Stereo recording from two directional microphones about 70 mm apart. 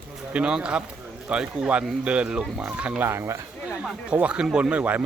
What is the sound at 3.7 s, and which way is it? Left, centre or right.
Speech, centre.